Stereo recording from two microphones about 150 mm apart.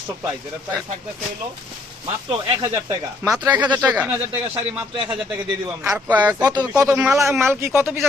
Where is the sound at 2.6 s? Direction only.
20° right (ahead or behind).